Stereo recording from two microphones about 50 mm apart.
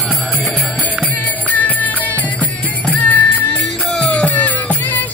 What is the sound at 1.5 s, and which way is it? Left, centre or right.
Music, left.